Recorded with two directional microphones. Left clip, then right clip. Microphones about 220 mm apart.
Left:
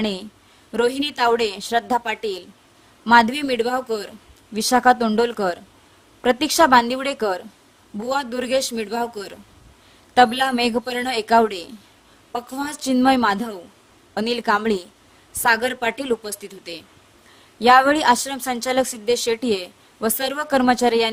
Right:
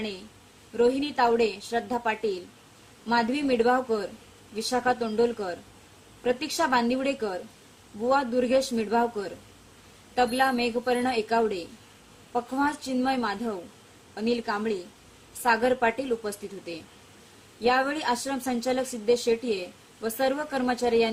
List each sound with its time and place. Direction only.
0.8 s a woman's voice: 55° left (ahead or behind)
10.2 s a woman's voice: 50° left (ahead or behind)
12.6 s a woman's voice: 55° left (ahead or behind)
17.6 s a woman's voice: 55° left (ahead or behind)